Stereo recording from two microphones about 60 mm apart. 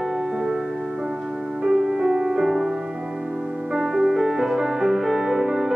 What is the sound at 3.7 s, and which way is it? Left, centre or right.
Music, centre.